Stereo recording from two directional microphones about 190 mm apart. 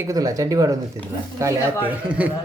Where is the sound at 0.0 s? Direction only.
20° right (ahead or behind).